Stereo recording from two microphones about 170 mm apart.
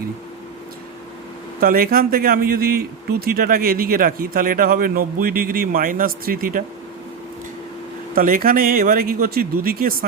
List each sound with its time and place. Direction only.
1.6 s speech: 60° right (ahead or behind)
8.1 s speech: 55° right (ahead or behind)